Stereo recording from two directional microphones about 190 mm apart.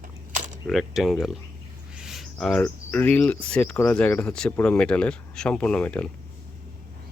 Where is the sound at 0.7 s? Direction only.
Centre (ahead or behind).